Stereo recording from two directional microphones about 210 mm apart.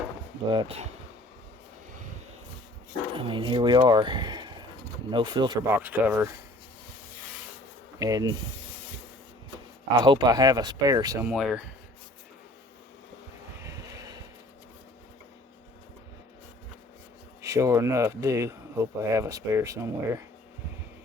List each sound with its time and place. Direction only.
0.5 s speech: 25° right (ahead or behind)
3.2 s speech: 25° right (ahead or behind)
5.6 s speech: 10° right (ahead or behind)
7.9 s speech: 15° right (ahead or behind)
10.0 s speech: 20° right (ahead or behind)
11.3 s speech: centre (ahead or behind)
13.6 s vehicle: 15° right (ahead or behind)
17.4 s speech: 15° right (ahead or behind)